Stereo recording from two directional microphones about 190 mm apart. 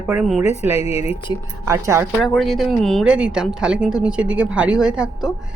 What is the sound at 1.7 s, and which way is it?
Speech, 15° right (ahead or behind).